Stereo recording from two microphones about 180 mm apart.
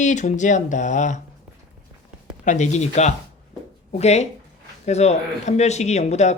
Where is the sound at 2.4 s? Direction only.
40° left (ahead or behind).